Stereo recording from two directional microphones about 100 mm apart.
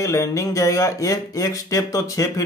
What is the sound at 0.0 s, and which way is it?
Speech, 30° left (ahead or behind).